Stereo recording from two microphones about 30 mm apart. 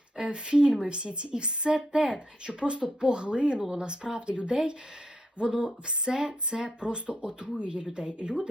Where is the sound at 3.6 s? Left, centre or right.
Right.